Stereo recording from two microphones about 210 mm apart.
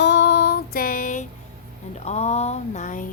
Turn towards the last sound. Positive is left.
turn(degrees=35)  # may be behind; listen again after turning